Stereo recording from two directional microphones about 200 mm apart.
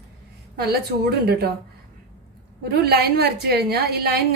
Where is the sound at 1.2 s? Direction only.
50° right (ahead or behind).